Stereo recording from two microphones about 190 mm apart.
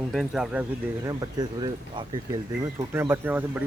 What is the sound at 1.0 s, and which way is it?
Speech, 20° right (ahead or behind).